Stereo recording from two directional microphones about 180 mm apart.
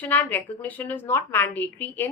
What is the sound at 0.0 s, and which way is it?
A woman's voice, 10° left (ahead or behind).